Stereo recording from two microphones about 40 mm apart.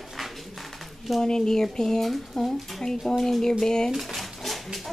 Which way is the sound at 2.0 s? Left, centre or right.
Centre.